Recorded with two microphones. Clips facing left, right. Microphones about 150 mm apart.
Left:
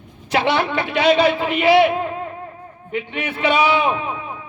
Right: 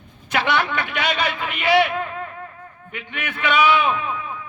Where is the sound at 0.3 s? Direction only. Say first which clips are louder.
Left 3 dB; 30° left (ahead or behind).